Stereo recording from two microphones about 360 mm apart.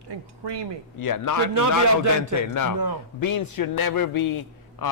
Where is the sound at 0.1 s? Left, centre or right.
Right.